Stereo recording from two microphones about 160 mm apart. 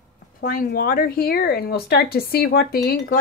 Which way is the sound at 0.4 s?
65° left (ahead or behind).